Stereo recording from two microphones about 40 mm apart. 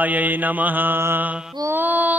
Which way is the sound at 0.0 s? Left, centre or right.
Right.